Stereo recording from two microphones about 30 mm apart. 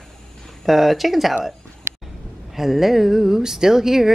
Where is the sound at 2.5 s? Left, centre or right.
Centre.